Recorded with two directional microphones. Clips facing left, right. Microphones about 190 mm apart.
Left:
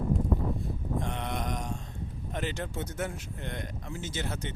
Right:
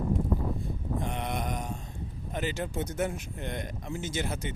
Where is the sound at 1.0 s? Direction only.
10° right (ahead or behind).